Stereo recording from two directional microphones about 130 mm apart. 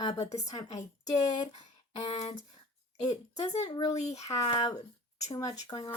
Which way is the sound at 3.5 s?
30° left (ahead or behind).